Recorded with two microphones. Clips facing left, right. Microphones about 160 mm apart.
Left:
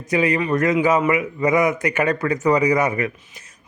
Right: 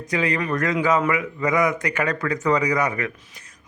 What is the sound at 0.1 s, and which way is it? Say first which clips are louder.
Speech: left 4 dB; 20° left (ahead or behind).